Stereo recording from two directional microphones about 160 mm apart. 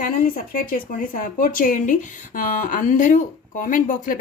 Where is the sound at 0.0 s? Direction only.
60° left (ahead or behind).